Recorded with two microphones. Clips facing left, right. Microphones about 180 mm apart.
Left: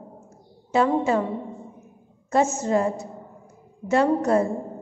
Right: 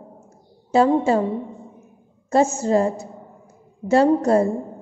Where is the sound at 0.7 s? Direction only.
30° right (ahead or behind).